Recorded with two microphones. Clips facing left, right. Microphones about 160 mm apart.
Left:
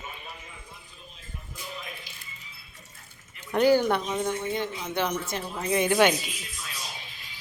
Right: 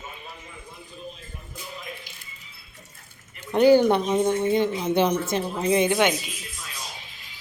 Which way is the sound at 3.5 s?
20° right (ahead or behind).